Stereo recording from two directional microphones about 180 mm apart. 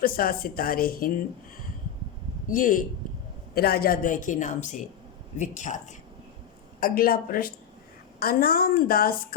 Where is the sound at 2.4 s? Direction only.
50° left (ahead or behind).